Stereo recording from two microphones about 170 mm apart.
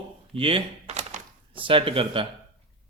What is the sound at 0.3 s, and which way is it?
Speech, 35° right (ahead or behind).